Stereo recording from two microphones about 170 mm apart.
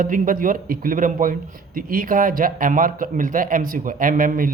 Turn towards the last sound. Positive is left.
turn(degrees=-55)  # may be behind; listen again after turning